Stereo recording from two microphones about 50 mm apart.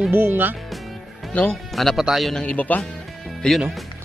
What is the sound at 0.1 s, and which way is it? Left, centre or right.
Speech, right.